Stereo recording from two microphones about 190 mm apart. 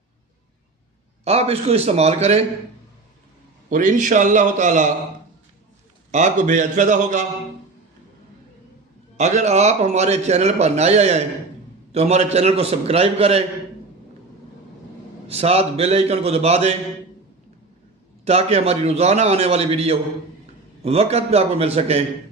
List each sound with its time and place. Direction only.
1.2 s a man's voice: 35° right (ahead or behind)
3.7 s a man's voice: 40° right (ahead or behind)
6.1 s a man's voice: 40° right (ahead or behind)
9.1 s a man's voice: 40° right (ahead or behind)
15.3 s a man's voice: 30° right (ahead or behind)
18.3 s a man's voice: 35° right (ahead or behind)